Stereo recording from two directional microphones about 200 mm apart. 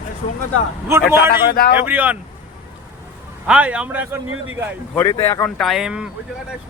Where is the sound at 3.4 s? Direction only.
5° right (ahead or behind).